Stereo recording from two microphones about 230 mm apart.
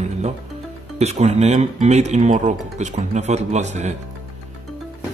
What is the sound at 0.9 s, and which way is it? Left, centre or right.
Speech, right.